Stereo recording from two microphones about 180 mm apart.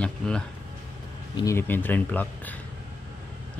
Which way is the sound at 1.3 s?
15° left (ahead or behind).